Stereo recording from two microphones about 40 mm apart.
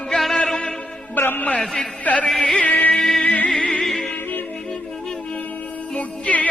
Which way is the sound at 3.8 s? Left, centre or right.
Centre.